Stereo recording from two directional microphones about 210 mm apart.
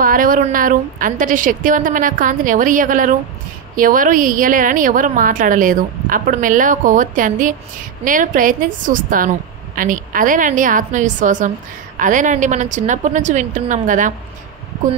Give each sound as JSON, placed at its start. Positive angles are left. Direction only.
{"t": 0.0, "sound": "a woman's voice", "side_deg": -40}